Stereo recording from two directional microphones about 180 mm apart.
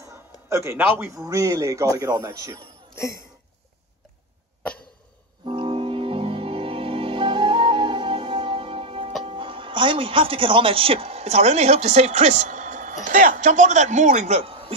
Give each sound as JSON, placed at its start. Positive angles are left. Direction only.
{"t": 0.5, "sound": "a man's voice", "side_deg": -15}
{"t": 5.4, "sound": "music", "side_deg": -30}
{"t": 9.2, "sound": "speech", "side_deg": -30}